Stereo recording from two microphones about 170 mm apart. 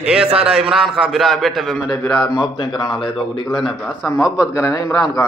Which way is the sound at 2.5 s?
30° left (ahead or behind).